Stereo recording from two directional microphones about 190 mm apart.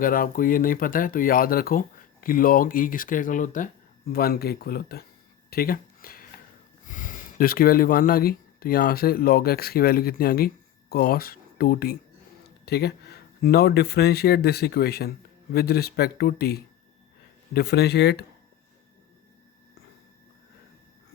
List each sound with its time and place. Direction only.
0.0 s speech: 50° left (ahead or behind)
5.5 s a sound: 50° left (ahead or behind)
6.8 s speech: 45° left (ahead or behind)